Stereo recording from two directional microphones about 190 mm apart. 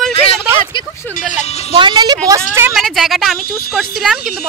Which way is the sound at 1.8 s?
25° right (ahead or behind).